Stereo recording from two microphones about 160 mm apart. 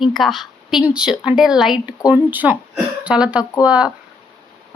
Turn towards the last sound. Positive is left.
turn(degrees=-5)  # may be behind; listen again after turning